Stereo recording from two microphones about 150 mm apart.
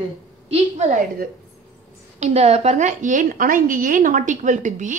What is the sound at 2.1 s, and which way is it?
A woman's voice, 45° right (ahead or behind).